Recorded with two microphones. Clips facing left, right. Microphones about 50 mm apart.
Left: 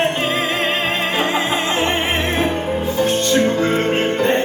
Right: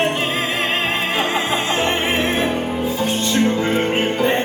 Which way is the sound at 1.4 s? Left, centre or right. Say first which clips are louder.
Left 1 dB; left.